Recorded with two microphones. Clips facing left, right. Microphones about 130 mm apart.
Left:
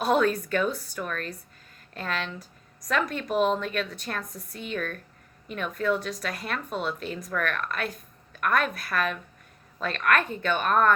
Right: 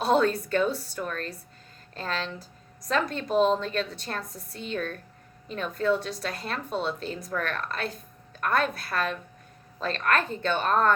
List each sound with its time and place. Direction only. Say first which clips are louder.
0.0 s a woman's voice: even; 30° right (ahead or behind)